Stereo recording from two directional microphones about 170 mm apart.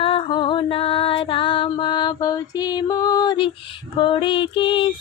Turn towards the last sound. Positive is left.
turn(degrees=30)  # may be behind; listen again after turning